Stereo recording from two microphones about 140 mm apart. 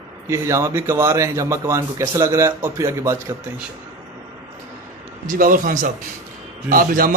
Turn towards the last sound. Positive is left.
turn(degrees=-90)